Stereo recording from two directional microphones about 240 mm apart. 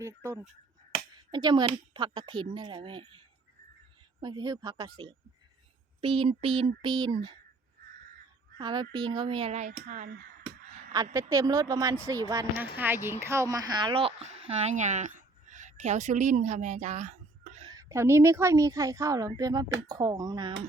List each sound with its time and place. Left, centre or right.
0.0 s speech: centre
8.5 s speech: centre; by 10.2 s right
10.9 s a woman's voice: centre; by 17.7 s right
17.7 s speech: centre